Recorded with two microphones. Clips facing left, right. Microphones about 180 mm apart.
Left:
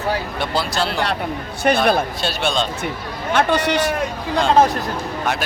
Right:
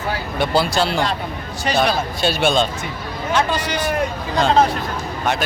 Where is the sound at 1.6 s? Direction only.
55° left (ahead or behind).